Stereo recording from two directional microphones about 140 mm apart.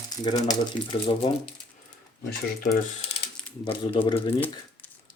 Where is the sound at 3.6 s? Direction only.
35° left (ahead or behind).